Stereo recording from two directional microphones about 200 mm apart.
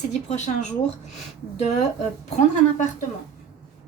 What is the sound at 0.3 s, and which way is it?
Speech, 35° left (ahead or behind).